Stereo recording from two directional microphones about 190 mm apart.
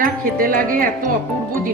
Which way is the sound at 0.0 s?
45° right (ahead or behind).